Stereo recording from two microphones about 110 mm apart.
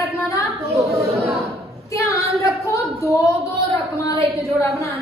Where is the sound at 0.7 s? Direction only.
30° right (ahead or behind).